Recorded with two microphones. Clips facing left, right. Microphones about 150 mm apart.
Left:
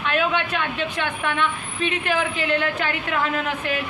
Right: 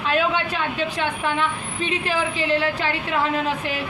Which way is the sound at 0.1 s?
30° right (ahead or behind).